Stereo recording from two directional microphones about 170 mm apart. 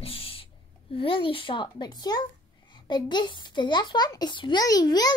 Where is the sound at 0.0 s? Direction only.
35° left (ahead or behind).